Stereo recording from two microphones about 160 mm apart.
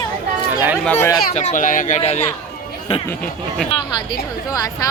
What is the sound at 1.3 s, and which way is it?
Speech, 50° left (ahead or behind).